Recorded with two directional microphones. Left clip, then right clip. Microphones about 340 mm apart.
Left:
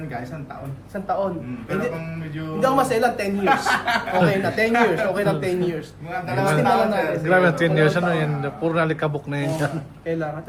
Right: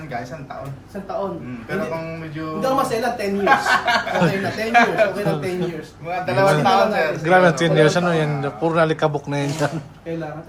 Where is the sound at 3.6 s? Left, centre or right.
Centre.